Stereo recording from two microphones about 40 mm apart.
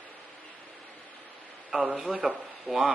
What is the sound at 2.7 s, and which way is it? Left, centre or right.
Speech, centre.